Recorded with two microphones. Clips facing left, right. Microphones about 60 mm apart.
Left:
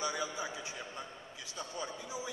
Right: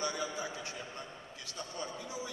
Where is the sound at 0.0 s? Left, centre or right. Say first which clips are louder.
Even; centre.